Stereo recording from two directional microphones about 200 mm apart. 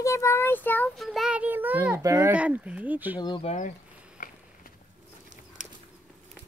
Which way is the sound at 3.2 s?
25° left (ahead or behind).